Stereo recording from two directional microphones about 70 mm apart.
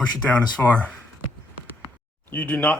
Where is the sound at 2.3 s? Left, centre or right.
Left.